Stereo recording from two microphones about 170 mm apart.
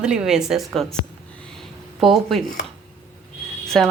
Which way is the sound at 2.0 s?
Centre (ahead or behind).